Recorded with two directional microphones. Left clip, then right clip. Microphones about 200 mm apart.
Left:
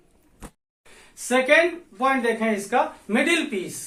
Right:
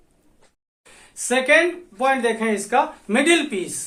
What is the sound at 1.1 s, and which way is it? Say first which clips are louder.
Speech: right 1 dB; 45° right (ahead or behind).